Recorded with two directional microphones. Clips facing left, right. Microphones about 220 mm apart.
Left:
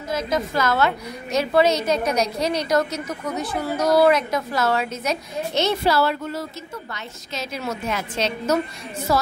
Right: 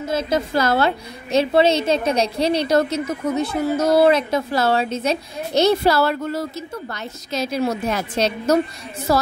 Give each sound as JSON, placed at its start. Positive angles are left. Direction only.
{"t": 0.1, "sound": "a woman's voice", "side_deg": -30}